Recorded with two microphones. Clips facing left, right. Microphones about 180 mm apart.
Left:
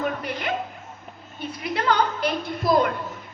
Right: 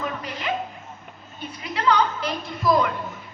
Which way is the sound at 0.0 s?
55° left (ahead or behind).